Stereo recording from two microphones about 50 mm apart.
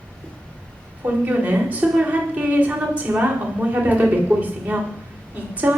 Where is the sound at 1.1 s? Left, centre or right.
Right.